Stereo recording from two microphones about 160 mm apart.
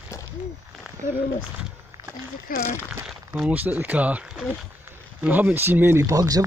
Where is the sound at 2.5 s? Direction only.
65° left (ahead or behind).